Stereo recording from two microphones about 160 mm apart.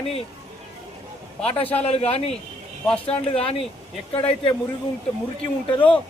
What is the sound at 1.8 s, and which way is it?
Speech, 40° left (ahead or behind).